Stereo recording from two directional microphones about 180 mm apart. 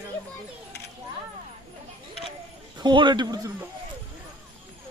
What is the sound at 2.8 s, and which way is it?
Speech, 25° right (ahead or behind).